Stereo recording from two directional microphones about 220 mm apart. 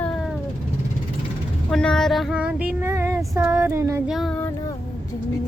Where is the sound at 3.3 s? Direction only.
15° right (ahead or behind).